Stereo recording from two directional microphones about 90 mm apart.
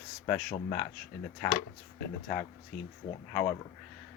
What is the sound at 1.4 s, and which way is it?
Speech, 15° left (ahead or behind).